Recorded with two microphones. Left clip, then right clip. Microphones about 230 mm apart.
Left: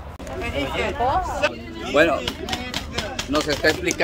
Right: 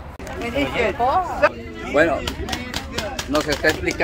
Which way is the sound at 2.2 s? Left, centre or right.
Right.